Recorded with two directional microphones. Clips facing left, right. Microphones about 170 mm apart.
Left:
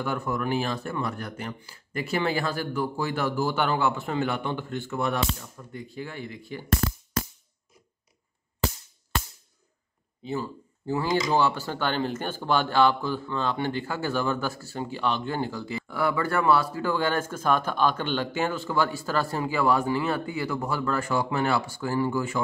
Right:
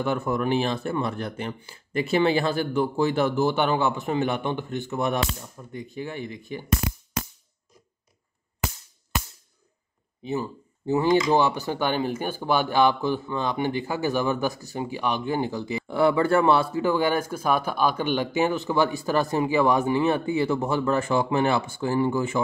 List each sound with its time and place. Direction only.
0.0 s speech: 25° right (ahead or behind)
10.2 s speech: 20° right (ahead or behind)